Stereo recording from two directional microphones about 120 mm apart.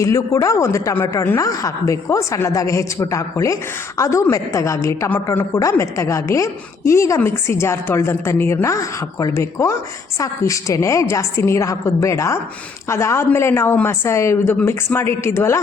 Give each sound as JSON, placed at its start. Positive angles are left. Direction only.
{"t": 0.0, "sound": "a woman's voice", "side_deg": 30}